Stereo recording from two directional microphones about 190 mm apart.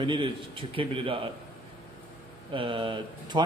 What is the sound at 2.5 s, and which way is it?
Speech, 25° right (ahead or behind).